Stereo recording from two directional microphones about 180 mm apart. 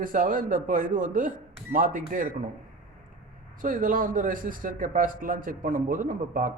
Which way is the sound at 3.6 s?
50° right (ahead or behind).